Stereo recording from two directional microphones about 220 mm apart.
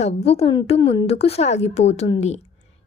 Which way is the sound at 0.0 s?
30° left (ahead or behind).